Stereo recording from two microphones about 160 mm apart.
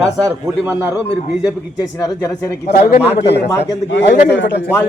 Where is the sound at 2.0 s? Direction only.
25° left (ahead or behind).